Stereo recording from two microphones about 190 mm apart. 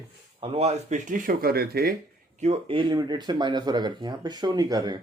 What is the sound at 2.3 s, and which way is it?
Speech, 35° right (ahead or behind).